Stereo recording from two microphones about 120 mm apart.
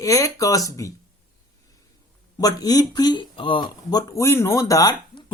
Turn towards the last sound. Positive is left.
turn(degrees=30)  # may be behind; listen again after turning